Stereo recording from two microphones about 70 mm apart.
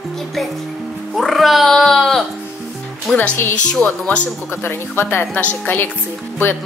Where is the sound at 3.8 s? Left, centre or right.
Centre.